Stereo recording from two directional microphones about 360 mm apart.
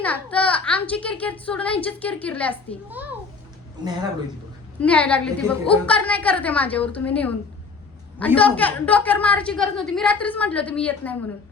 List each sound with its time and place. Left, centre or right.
0.0 s a woman's voice: centre
4.8 s a woman's voice: centre